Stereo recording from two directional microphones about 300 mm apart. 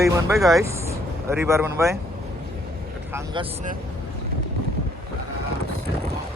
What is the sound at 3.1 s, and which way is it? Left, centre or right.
Speech, centre.